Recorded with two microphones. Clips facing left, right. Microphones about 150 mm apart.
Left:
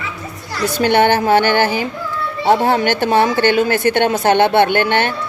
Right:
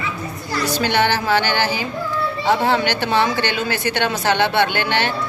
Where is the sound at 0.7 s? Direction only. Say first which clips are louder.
Left 6 dB; 50° left (ahead or behind).